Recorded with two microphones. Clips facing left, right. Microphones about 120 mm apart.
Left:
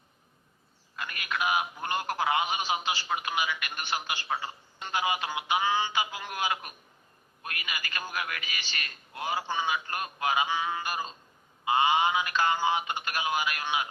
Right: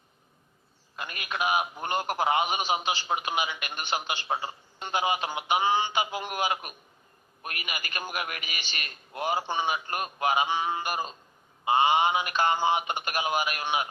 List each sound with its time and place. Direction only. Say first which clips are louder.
0.9 s a man's voice: right 1 dB; 25° right (ahead or behind)